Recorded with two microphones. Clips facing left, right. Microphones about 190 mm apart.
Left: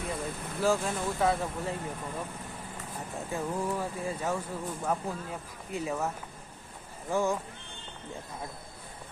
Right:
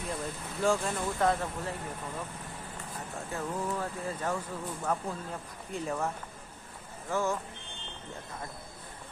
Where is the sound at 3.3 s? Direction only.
10° left (ahead or behind).